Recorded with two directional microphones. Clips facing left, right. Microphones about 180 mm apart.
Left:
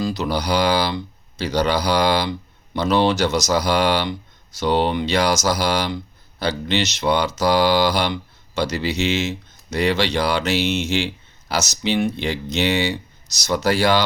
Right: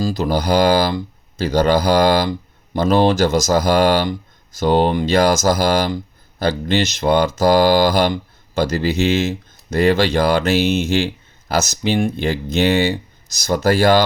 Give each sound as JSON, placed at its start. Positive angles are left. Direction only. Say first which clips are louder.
{"t": 0.0, "sound": "speech", "louder": "right 3 dB", "side_deg": -45}